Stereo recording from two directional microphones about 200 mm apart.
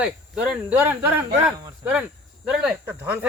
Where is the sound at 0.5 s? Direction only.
10° right (ahead or behind).